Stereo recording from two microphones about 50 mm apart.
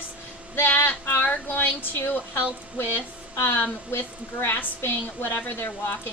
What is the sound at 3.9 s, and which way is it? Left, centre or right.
A woman's voice, left.